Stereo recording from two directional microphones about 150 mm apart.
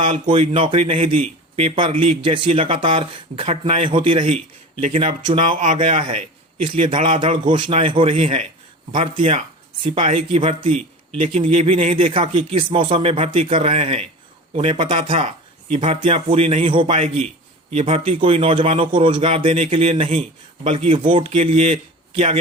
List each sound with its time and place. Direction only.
0.1 s speech: 40° right (ahead or behind)
5.4 s speech: 55° right (ahead or behind)
6.7 s a man's voice: 45° right (ahead or behind)
7.2 s speech: 35° right (ahead or behind)